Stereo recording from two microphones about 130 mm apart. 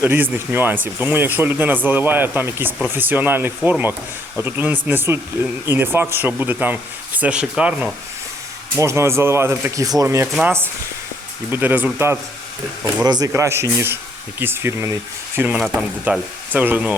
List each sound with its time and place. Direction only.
0.0 s speech: 15° right (ahead or behind)
8.7 s speech: 20° right (ahead or behind)
13.1 s speech: 30° right (ahead or behind); by 16.9 s 10° right (ahead or behind)